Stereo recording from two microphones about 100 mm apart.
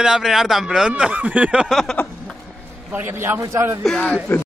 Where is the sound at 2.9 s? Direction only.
20° right (ahead or behind).